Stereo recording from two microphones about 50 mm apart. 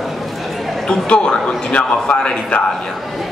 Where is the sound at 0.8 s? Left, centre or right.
Left.